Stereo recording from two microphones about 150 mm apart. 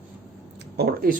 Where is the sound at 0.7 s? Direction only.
90° right.